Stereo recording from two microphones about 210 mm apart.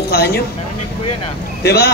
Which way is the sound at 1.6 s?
50° left (ahead or behind).